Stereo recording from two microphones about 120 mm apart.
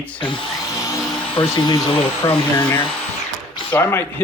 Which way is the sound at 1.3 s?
40° left (ahead or behind).